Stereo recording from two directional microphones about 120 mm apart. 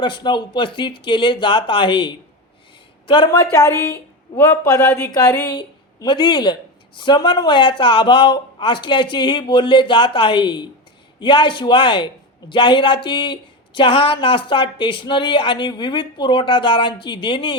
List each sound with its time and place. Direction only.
0.0 s a man's voice: 40° left (ahead or behind)
3.5 s a woman's voice: 25° left (ahead or behind); by 17.5 s 45° left (ahead or behind)